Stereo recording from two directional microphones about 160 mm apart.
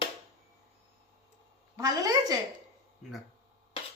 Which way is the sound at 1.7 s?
20° right (ahead or behind).